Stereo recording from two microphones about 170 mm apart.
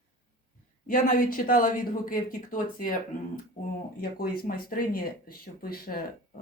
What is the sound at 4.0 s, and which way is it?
Speech, 60° left (ahead or behind).